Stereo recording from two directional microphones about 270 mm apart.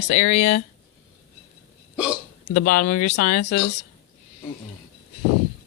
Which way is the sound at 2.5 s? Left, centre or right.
Left.